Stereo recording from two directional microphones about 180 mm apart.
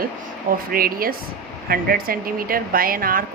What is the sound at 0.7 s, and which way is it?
A woman's voice, 55° right (ahead or behind).